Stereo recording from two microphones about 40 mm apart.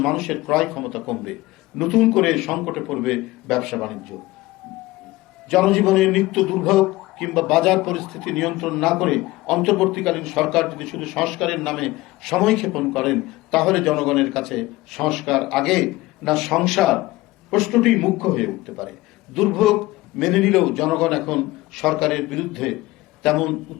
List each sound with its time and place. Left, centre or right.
0.0 s speech: centre
5.5 s a man's voice: centre